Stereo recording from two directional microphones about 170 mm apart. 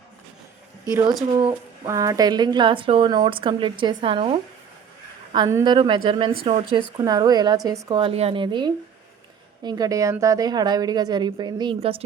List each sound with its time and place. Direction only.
1.9 s a woman's voice: 20° right (ahead or behind)
5.3 s a woman's voice: 20° right (ahead or behind)